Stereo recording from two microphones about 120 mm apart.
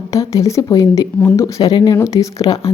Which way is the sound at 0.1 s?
25° left (ahead or behind).